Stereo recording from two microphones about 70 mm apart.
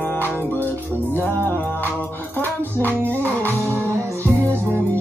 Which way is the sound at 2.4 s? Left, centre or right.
Left.